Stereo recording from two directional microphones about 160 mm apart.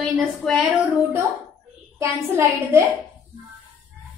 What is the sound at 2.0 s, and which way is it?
Speech, 15° right (ahead or behind).